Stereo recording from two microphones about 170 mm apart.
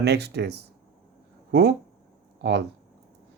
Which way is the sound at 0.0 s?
75° right (ahead or behind).